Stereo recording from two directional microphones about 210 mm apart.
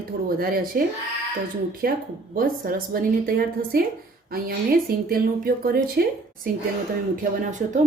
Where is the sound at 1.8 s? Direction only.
45° right (ahead or behind).